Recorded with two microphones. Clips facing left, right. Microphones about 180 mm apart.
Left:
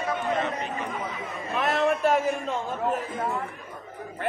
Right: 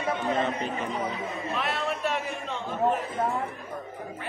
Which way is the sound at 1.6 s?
45° left (ahead or behind).